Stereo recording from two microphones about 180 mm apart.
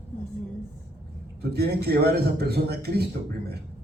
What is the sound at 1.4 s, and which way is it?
A man's voice, 60° right (ahead or behind).